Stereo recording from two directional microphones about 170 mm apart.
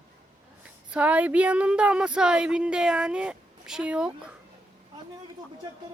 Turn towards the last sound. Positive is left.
turn(degrees=-5)  # may be behind; listen again after turning